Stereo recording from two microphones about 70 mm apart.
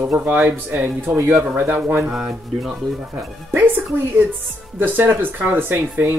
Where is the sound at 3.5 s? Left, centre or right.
Right.